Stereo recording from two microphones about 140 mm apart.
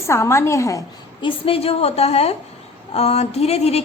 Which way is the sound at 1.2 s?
40° left (ahead or behind).